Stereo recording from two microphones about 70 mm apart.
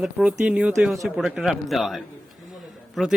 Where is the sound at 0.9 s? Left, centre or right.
Centre.